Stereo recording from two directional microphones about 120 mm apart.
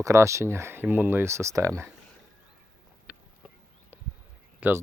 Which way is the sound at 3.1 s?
10° right (ahead or behind).